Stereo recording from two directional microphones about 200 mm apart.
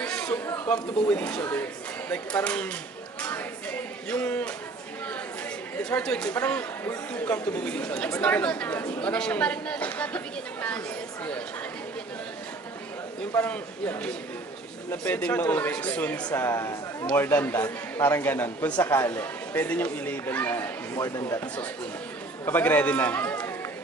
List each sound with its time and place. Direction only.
0.0 s chatter: 5° left (ahead or behind)
0.7 s a man's voice: 5° left (ahead or behind)
3.2 s a sound: 10° left (ahead or behind)
4.1 s a man's voice: 5° left (ahead or behind)
5.9 s a man's voice: 5° left (ahead or behind)
13.3 s a man's voice: 10° left (ahead or behind)